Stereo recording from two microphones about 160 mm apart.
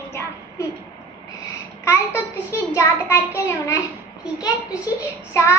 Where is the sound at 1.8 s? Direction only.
20° left (ahead or behind).